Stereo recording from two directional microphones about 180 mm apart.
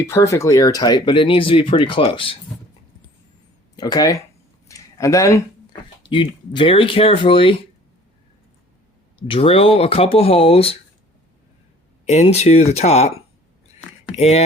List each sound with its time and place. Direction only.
0.0 s speech: 15° left (ahead or behind)
3.8 s speech: 20° left (ahead or behind)
4.7 s a sound: 15° left (ahead or behind)
6.1 s speech: 30° left (ahead or behind)
9.1 s speech: 30° left (ahead or behind)
12.0 s speech: 35° left (ahead or behind)
14.2 s speech: 35° left (ahead or behind)